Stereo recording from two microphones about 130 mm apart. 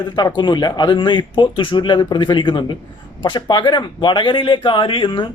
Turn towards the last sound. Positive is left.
turn(degrees=40)  # may be behind; listen again after turning